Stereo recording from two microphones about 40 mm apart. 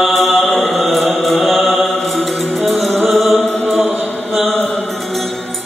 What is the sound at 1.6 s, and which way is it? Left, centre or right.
Mantra, right.